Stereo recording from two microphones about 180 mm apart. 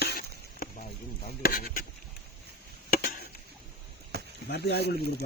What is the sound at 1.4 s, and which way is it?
Speech, 55° left (ahead or behind).